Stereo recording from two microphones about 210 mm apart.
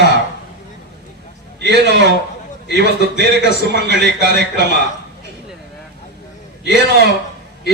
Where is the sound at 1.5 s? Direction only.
55° right (ahead or behind).